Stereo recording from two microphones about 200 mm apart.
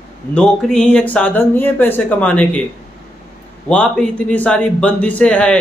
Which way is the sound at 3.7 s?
5° left (ahead or behind).